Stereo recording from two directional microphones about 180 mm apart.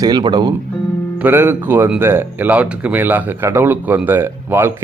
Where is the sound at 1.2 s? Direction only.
10° right (ahead or behind).